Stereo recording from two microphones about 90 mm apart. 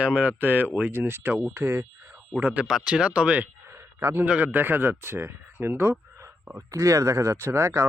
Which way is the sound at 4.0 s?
25° right (ahead or behind).